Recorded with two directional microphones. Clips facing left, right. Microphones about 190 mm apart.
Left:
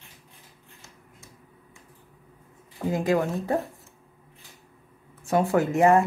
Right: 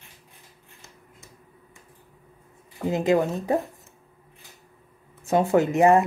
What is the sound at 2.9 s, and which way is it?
Speech, 20° right (ahead or behind).